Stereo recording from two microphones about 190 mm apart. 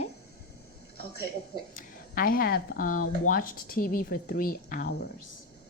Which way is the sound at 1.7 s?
50° left (ahead or behind).